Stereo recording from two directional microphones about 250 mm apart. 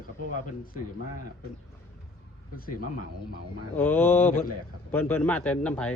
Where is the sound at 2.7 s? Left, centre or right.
Left.